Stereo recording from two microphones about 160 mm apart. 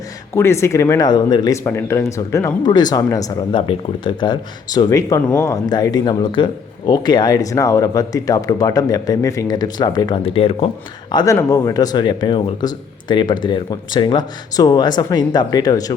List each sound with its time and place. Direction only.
0.3 s speech: 15° left (ahead or behind)
1.6 s speech: 15° left (ahead or behind)